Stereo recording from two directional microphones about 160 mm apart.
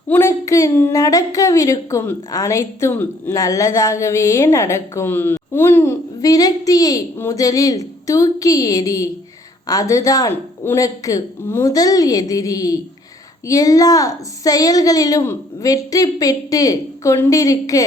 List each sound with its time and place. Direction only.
0.1 s a woman's voice: 15° left (ahead or behind)